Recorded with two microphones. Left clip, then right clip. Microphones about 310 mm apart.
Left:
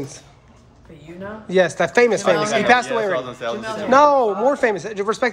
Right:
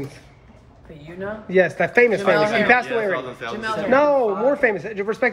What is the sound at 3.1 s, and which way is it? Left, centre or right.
Speech, left.